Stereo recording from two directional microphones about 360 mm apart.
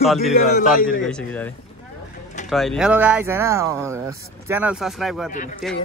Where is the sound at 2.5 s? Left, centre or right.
Centre.